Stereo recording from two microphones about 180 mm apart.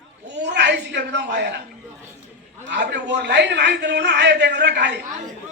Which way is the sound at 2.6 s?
70° right (ahead or behind).